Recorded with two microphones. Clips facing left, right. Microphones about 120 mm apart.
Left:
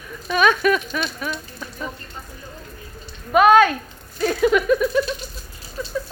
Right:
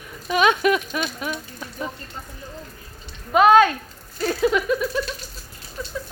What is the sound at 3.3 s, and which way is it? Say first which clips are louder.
Speech: left 1 dB; 25° right (ahead or behind).